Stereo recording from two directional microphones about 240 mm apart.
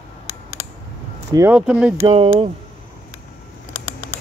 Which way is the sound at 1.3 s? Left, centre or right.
Centre.